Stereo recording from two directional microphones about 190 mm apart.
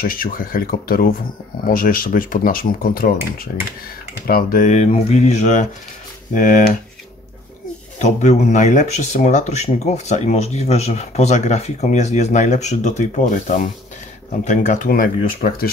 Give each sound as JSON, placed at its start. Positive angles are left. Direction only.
{"t": 0.0, "sound": "speech", "side_deg": 50}
{"t": 8.0, "sound": "speech", "side_deg": 40}